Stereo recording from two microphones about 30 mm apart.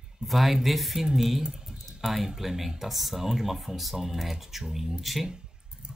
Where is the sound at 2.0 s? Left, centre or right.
Centre.